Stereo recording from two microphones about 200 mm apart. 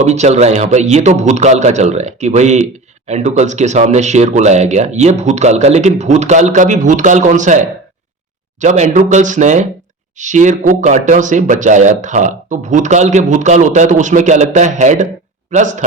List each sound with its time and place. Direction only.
0.0 s speech: 35° right (ahead or behind)
8.6 s a man's voice: 35° right (ahead or behind)